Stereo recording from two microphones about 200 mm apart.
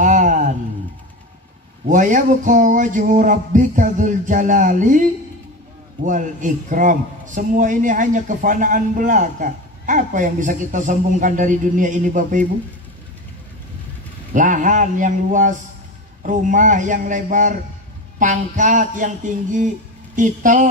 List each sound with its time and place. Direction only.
0.0 s a sound: 40° right (ahead or behind)
1.9 s a man's voice: 40° right (ahead or behind)
6.0 s a man's voice: 40° right (ahead or behind)
14.3 s a man's voice: 40° right (ahead or behind)